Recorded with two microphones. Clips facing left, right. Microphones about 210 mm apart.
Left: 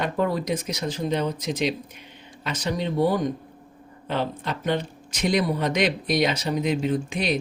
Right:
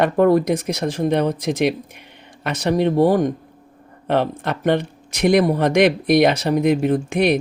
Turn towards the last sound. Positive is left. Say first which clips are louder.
# right 7 dB
turn(degrees=-65)  # may be behind; listen again after turning